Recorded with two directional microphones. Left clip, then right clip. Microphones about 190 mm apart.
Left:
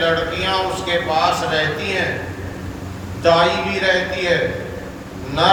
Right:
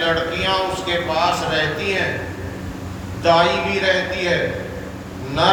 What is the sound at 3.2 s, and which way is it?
Speech, 35° right (ahead or behind).